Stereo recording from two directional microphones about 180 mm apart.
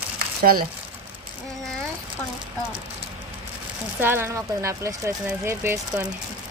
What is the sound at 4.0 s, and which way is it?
Speech, 10° right (ahead or behind).